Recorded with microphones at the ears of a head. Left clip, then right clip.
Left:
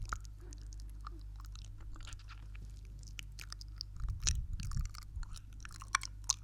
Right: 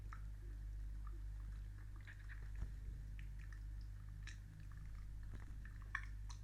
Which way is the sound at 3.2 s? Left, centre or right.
Left.